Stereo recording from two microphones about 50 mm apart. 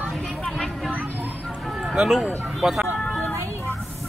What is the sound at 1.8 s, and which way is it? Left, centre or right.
Speech, centre.